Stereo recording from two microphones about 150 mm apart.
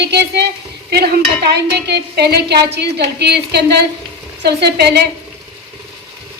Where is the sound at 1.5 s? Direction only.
90° right.